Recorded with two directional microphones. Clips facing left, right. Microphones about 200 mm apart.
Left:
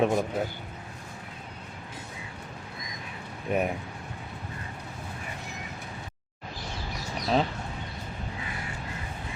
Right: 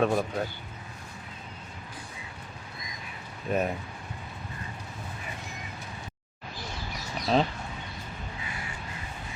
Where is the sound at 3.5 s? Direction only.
15° left (ahead or behind).